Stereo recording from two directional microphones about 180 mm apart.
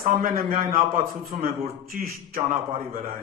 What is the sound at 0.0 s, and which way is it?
Speech, 50° right (ahead or behind).